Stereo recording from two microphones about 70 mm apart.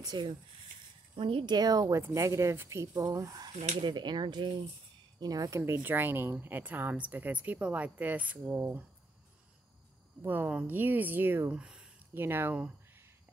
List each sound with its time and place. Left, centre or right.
0.0 s speech: right
1.4 s speech: right
2.0 s speech: right
2.9 s speech: right
5.2 s speech: right
5.7 s a woman's voice: right
10.2 s a woman's voice: right
11.5 s speech: centre
12.1 s speech: right